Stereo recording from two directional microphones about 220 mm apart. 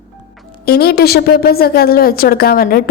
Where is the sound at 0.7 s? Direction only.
45° left (ahead or behind).